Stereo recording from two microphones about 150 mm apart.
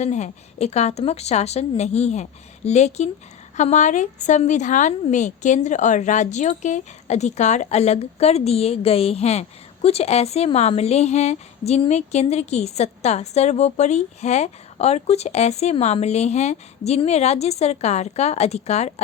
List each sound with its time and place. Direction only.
0.0 s a woman's voice: 50° left (ahead or behind)